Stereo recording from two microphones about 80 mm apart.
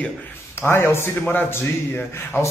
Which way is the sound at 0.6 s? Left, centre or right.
Left.